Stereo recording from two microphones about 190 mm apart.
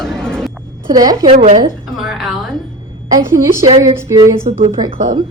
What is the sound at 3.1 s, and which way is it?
A woman's voice, 20° right (ahead or behind).